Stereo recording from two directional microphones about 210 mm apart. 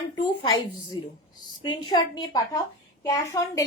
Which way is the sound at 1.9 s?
20° left (ahead or behind).